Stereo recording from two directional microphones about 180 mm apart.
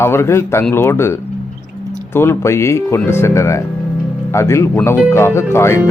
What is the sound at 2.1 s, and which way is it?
Speech, 15° left (ahead or behind).